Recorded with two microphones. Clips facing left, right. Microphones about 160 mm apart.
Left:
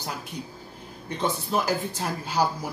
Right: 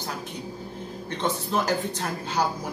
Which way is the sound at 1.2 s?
10° left (ahead or behind).